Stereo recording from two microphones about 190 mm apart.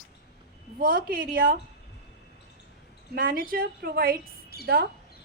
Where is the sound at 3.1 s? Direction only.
50° right (ahead or behind).